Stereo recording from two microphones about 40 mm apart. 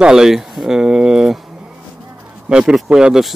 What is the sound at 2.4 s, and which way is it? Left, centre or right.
Speech, right.